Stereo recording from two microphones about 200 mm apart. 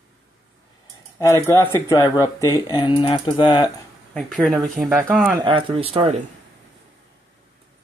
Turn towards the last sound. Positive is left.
turn(degrees=-30)  # may be behind; listen again after turning